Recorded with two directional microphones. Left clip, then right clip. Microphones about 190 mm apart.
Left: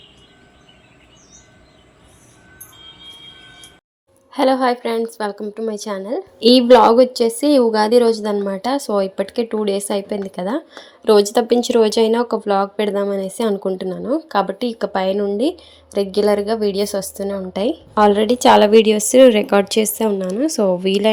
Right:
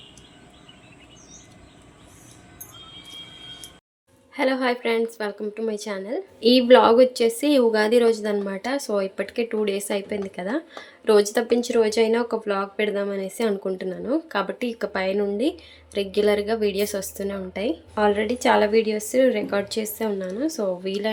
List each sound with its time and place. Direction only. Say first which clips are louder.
4.3 s a woman's voice: left 7 dB; 25° left (ahead or behind)
17.5 s a woman's voice: left 7 dB; 25° left (ahead or behind)